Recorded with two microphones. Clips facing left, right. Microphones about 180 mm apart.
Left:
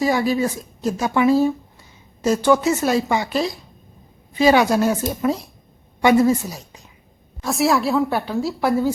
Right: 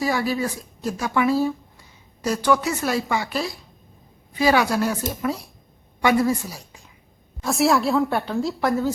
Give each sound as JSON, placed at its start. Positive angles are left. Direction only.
{"t": 0.0, "sound": "speech", "side_deg": 20}
{"t": 7.4, "sound": "a woman's voice", "side_deg": 0}